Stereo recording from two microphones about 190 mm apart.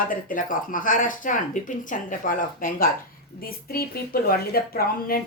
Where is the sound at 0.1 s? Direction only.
45° left (ahead or behind).